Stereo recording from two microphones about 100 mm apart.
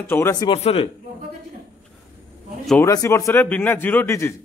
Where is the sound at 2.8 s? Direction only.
30° left (ahead or behind).